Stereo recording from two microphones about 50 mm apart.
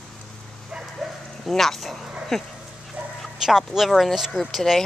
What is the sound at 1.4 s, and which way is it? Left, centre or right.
Speech, centre.